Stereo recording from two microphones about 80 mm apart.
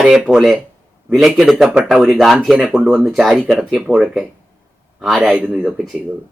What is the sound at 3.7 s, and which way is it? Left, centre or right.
Speech, centre.